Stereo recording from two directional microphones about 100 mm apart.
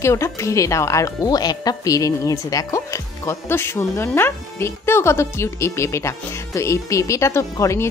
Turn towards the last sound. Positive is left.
turn(degrees=30)  # may be behind; listen again after turning